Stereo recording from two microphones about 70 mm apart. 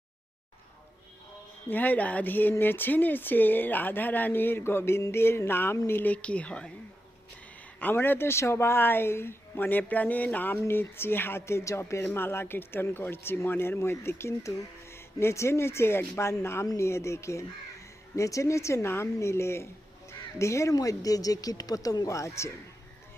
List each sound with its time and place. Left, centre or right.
1.7 s speech: left
6.2 s a woman's voice: centre
7.8 s speech: left
20.7 s speech: left